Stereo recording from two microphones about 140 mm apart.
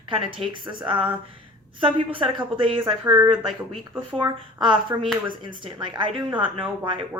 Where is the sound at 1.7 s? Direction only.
40° right (ahead or behind).